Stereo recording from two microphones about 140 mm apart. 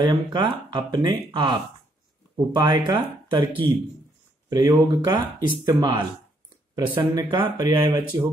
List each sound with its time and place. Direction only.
0.0 s speech: 30° right (ahead or behind)